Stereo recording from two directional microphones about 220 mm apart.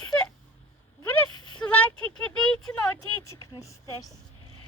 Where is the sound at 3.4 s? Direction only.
15° left (ahead or behind).